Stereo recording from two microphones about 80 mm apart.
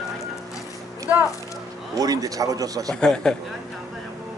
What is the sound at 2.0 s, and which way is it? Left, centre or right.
Speech, right.